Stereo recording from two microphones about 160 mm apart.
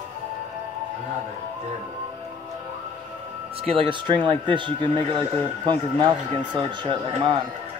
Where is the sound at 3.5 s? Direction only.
35° right (ahead or behind).